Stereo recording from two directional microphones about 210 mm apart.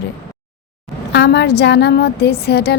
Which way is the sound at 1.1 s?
55° left (ahead or behind).